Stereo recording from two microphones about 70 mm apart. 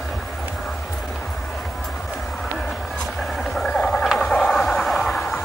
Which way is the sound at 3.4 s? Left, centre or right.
Centre.